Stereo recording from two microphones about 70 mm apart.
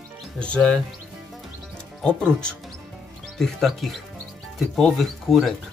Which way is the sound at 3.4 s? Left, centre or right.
Centre.